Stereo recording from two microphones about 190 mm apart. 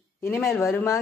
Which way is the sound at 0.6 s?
15° left (ahead or behind).